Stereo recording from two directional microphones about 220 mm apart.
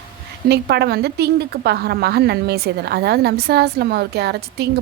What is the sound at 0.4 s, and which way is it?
A woman's voice, 50° right (ahead or behind).